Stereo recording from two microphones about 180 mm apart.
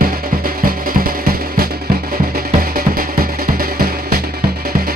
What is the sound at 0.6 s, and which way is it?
Music, 55° right (ahead or behind).